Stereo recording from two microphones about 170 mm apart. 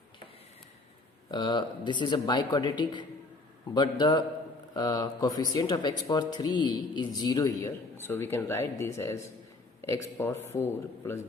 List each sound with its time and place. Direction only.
1.3 s a man's voice: 25° left (ahead or behind)